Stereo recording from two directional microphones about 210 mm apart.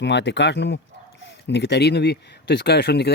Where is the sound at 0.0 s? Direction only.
55° left (ahead or behind).